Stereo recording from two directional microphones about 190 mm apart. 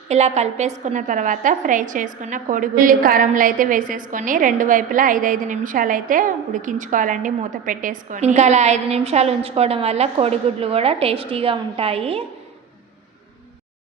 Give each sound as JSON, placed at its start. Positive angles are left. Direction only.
{"t": 0.1, "sound": "a woman's voice", "side_deg": -35}